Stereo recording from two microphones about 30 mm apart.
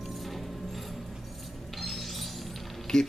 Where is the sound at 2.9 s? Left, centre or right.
Left.